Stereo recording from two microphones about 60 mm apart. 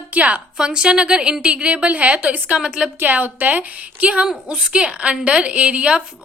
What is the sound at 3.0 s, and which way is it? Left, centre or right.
A woman's voice, right.